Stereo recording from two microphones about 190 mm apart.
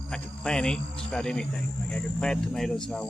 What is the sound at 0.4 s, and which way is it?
Speech, 5° left (ahead or behind).